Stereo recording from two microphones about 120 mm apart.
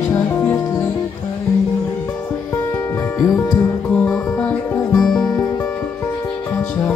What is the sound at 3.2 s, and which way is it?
Music, 15° left (ahead or behind).